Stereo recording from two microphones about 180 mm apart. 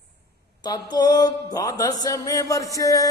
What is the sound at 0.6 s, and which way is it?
Mantra, 25° left (ahead or behind).